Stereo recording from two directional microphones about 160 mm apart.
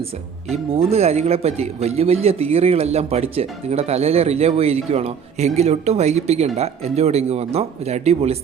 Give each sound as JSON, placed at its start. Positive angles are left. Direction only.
{"t": 0.5, "sound": "speech", "side_deg": -40}